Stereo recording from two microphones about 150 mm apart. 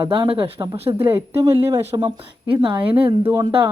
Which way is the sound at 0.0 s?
35° right (ahead or behind).